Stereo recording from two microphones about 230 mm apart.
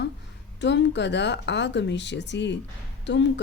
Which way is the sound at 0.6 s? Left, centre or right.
Left.